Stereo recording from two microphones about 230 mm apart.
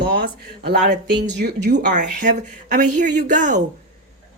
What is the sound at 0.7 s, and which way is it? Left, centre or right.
Speech, right.